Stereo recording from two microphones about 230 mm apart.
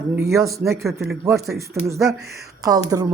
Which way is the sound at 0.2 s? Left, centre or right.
Centre.